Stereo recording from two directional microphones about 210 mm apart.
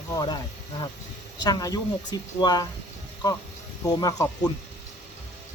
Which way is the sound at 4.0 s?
15° left (ahead or behind).